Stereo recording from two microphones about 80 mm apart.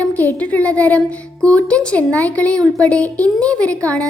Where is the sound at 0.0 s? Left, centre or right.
Left.